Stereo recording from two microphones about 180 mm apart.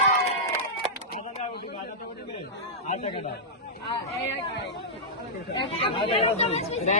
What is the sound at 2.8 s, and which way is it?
Chatter, 40° left (ahead or behind).